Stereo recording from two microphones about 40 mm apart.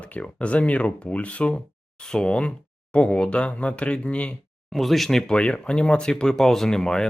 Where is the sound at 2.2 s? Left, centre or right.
Left.